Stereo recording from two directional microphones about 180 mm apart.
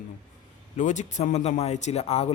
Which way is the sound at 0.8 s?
45° left (ahead or behind).